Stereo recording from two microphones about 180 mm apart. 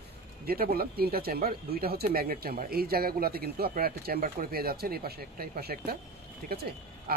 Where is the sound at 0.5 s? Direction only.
55° right (ahead or behind).